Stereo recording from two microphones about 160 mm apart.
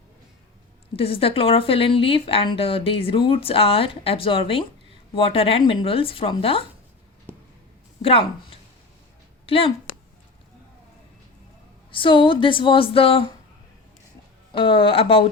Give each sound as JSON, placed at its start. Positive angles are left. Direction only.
{"t": 0.9, "sound": "speech", "side_deg": 35}
{"t": 8.0, "sound": "speech", "side_deg": 35}
{"t": 11.9, "sound": "speech", "side_deg": 35}
{"t": 14.5, "sound": "speech", "side_deg": 30}